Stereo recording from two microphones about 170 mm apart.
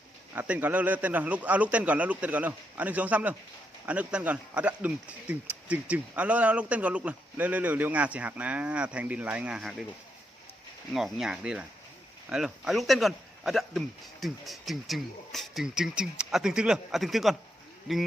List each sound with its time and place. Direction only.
0.3 s speech: 10° right (ahead or behind)
10.9 s speech: centre (ahead or behind)